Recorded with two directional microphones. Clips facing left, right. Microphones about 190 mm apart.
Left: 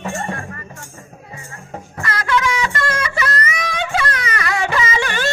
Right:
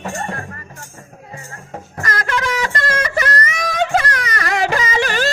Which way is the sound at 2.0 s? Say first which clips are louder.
Left 2 dB; 45° right (ahead or behind).